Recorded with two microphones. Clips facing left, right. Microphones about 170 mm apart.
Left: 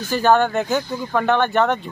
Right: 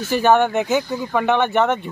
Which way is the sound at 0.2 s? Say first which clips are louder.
Even; 15° right (ahead or behind).